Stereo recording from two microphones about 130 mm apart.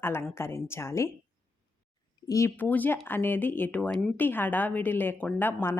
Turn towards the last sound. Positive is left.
turn(degrees=15)  # may be behind; listen again after turning